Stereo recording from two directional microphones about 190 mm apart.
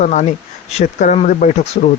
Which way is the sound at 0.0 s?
40° left (ahead or behind).